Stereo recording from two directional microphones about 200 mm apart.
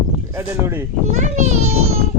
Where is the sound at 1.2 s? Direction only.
35° right (ahead or behind).